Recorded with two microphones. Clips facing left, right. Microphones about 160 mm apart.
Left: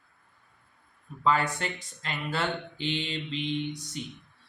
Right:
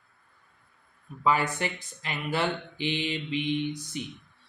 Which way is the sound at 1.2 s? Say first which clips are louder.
Right 1 dB; 10° right (ahead or behind).